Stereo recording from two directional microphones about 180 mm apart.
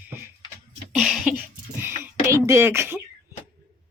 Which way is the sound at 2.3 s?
15° right (ahead or behind).